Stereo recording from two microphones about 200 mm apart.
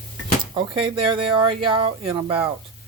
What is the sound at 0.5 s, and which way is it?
Speech, 25° right (ahead or behind).